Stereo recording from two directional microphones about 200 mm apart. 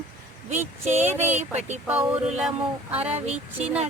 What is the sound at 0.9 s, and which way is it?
Speech, 35° right (ahead or behind).